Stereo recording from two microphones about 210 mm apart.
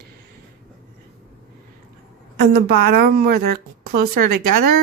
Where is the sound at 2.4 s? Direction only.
45° right (ahead or behind).